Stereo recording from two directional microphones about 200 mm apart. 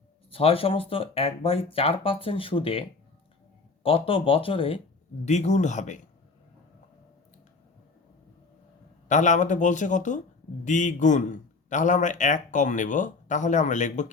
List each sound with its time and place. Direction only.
0.3 s speech: 25° left (ahead or behind)
3.8 s a man's voice: 25° left (ahead or behind)
9.0 s a man's voice: 40° left (ahead or behind)